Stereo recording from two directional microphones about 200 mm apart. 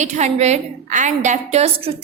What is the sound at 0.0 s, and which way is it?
A woman's voice, 35° right (ahead or behind).